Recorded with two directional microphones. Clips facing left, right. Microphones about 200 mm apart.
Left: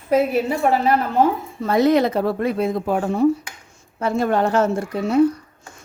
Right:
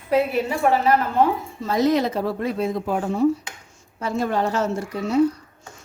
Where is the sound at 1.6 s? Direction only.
60° left (ahead or behind).